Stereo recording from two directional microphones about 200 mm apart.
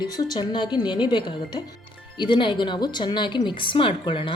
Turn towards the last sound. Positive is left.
turn(degrees=25)  # may be behind; listen again after turning